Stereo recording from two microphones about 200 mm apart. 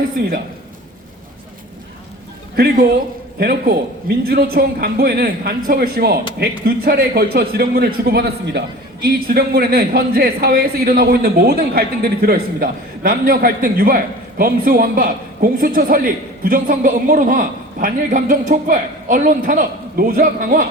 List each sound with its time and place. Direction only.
3.3 s a man's voice: 50° right (ahead or behind)